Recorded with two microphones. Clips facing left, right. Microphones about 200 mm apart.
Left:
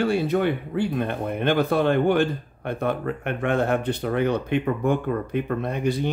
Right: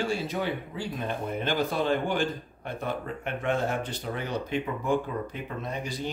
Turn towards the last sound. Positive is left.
turn(degrees=60)  # may be behind; listen again after turning